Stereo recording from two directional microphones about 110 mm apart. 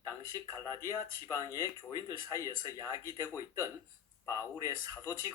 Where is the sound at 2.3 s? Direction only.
30° left (ahead or behind).